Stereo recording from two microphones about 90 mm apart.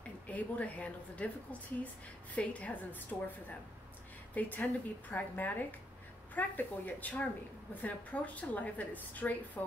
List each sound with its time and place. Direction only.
0.3 s a woman's voice: 15° left (ahead or behind)